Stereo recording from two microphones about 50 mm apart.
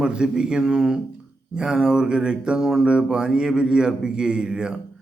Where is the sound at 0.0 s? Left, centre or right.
Centre.